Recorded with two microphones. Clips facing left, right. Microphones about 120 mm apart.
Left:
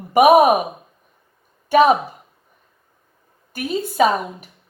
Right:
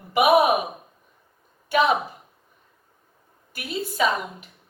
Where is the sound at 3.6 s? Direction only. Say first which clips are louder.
Left 7 dB; 45° left (ahead or behind).